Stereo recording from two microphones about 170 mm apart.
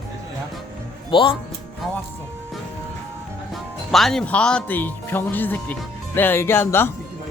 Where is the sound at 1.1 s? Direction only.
30° left (ahead or behind).